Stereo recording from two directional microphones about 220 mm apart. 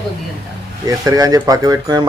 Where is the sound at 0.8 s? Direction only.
15° right (ahead or behind).